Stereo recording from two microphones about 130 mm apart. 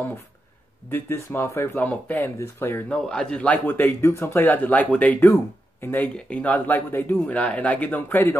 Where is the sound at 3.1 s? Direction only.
5° left (ahead or behind).